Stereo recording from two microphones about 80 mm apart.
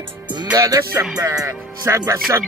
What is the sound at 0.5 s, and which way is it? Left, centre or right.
Music, right.